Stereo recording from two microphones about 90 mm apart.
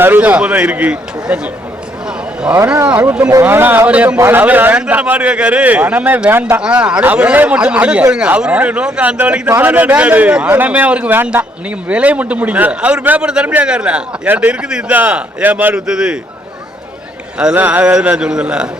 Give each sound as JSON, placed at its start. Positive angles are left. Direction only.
{"t": 0.0, "sound": "a man's voice", "side_deg": -20}
{"t": 2.9, "sound": "a man's voice", "side_deg": -20}
{"t": 17.3, "sound": "a man's voice", "side_deg": -15}